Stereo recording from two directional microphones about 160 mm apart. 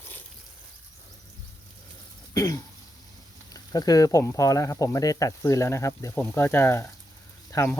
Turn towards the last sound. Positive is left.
turn(degrees=15)  # may be behind; listen again after turning